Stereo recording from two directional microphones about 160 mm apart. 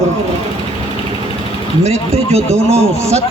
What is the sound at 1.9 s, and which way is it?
Speech, 40° right (ahead or behind).